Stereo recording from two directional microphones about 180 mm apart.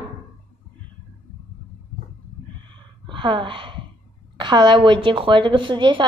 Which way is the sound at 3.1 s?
25° right (ahead or behind).